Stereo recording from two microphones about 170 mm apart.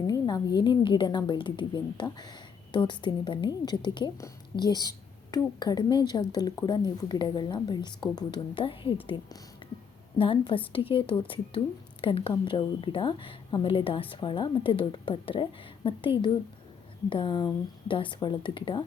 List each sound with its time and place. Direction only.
0.1 s a woman's voice: 25° left (ahead or behind)